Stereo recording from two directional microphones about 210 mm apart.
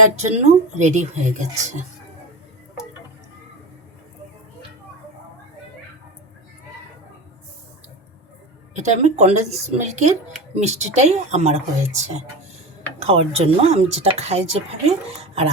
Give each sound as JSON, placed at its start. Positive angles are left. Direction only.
{"t": 0.3, "sound": "a woman's voice", "side_deg": -35}
{"t": 8.7, "sound": "a woman's voice", "side_deg": -35}